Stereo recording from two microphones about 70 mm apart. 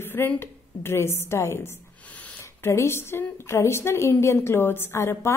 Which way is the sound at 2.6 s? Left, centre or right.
Left.